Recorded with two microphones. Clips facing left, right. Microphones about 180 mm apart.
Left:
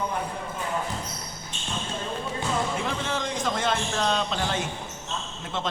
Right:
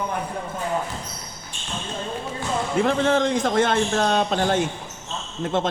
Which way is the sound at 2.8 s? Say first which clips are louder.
Right 10 dB; 55° right (ahead or behind).